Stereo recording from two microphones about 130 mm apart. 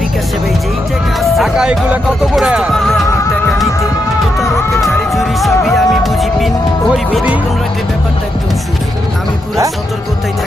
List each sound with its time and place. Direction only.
1.2 s speech: centre (ahead or behind)
4.4 s music: centre (ahead or behind)